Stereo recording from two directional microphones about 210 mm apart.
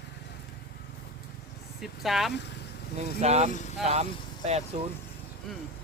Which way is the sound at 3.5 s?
35° left (ahead or behind).